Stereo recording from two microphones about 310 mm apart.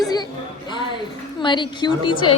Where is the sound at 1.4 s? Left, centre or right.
Centre.